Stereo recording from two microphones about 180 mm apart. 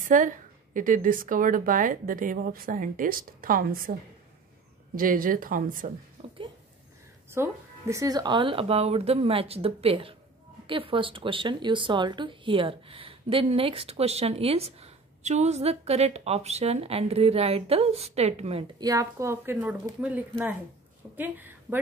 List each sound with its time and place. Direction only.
0.0 s a woman's voice: 45° right (ahead or behind)
4.9 s speech: 50° right (ahead or behind)
6.2 s a sound: 35° right (ahead or behind)
7.9 s speech: 20° right (ahead or behind); by 18.7 s 35° right (ahead or behind)
18.8 s a woman's voice: 20° right (ahead or behind)